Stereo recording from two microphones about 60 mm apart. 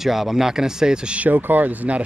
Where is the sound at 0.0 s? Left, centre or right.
Centre.